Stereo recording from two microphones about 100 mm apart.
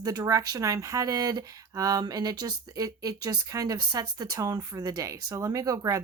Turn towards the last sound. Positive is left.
turn(degrees=-35)  # may be behind; listen again after turning